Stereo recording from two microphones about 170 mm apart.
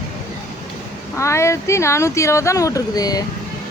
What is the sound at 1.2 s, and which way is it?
Speech, 15° left (ahead or behind).